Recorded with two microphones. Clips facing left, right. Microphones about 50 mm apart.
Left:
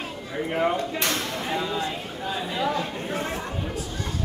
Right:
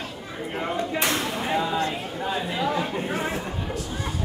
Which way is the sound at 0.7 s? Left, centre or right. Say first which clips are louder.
Right 2 dB; centre.